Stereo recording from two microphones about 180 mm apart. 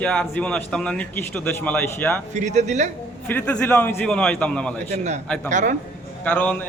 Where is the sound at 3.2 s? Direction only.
10° left (ahead or behind).